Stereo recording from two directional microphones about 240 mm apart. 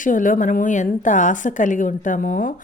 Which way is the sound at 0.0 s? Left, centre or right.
Left.